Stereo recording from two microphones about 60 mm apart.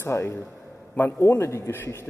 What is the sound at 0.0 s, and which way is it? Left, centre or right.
Speech, left.